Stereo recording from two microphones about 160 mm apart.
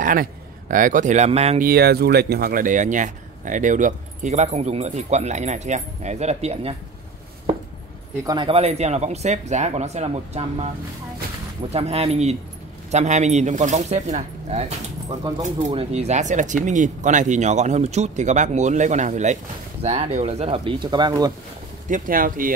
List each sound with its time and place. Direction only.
0.0 s speech: 60° right (ahead or behind); by 1.6 s 40° right (ahead or behind)
1.6 s speech: 75° right (ahead or behind); by 6.7 s 40° right (ahead or behind)
8.2 s speech: 25° right (ahead or behind)
8.5 s speech: 40° right (ahead or behind)
11.7 s speech: 40° right (ahead or behind); by 21.3 s 25° right (ahead or behind)
21.8 s speech: 55° right (ahead or behind)